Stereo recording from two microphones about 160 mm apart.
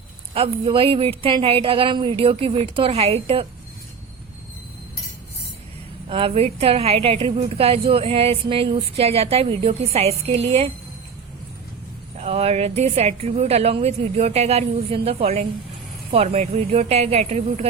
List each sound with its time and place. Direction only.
0.3 s a woman's voice: 35° right (ahead or behind)
6.1 s a woman's voice: 35° right (ahead or behind)
12.2 s a woman's voice: 40° right (ahead or behind)